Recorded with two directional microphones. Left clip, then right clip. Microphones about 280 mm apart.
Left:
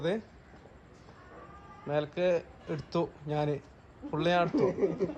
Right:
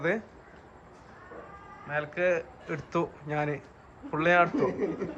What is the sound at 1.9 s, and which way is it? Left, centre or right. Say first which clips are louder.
A man's voice: right 1 dB; centre.